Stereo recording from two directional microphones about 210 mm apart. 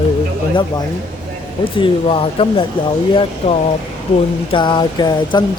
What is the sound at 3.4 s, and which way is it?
Speech, 30° left (ahead or behind).